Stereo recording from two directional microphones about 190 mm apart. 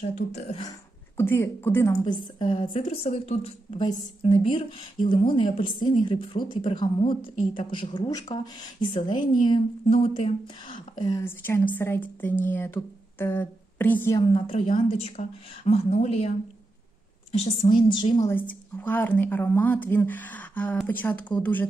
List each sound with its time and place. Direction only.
0.0 s a woman's voice: 35° left (ahead or behind)
0.6 s a woman's voice: 15° left (ahead or behind)
11.2 s speech: 10° left (ahead or behind)
14.2 s a woman's voice: 25° left (ahead or behind)
17.3 s a woman's voice: 30° left (ahead or behind)
18.8 s speech: 10° left (ahead or behind)